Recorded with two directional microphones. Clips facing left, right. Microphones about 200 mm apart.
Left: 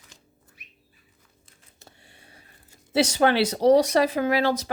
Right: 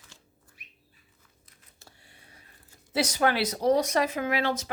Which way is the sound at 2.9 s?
30° left (ahead or behind).